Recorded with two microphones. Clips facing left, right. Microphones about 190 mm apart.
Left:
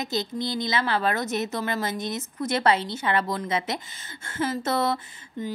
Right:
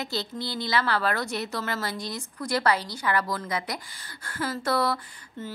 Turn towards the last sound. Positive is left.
turn(degrees=20)  # may be behind; listen again after turning